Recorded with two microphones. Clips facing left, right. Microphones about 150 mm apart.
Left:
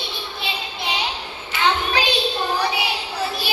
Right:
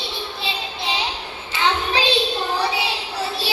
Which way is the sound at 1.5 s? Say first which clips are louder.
Even; 30° right (ahead or behind).